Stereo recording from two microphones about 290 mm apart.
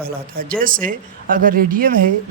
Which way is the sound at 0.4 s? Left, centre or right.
Right.